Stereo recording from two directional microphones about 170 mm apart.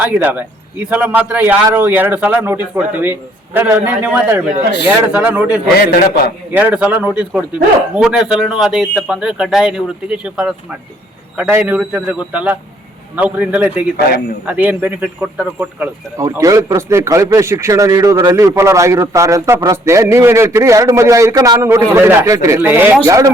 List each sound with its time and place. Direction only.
0.0 s speech: 10° right (ahead or behind)